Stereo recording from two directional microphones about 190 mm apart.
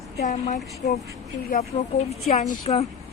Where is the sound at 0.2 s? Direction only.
35° left (ahead or behind).